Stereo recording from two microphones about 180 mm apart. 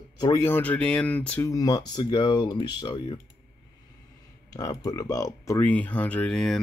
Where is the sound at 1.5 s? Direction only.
20° left (ahead or behind).